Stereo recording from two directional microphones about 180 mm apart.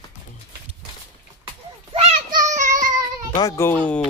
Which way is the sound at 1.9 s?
40° right (ahead or behind).